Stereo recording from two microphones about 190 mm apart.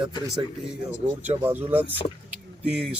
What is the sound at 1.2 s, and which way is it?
Speech, 10° right (ahead or behind).